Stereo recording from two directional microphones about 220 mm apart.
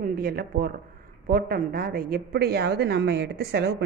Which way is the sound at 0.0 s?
40° right (ahead or behind).